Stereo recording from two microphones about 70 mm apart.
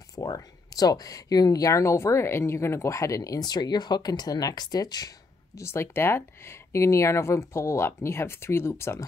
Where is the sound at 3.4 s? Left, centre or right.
Left.